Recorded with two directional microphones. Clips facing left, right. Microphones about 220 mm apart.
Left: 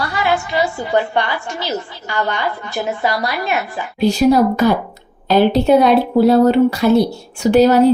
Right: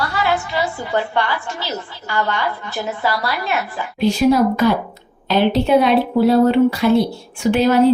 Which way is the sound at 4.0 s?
40° left (ahead or behind).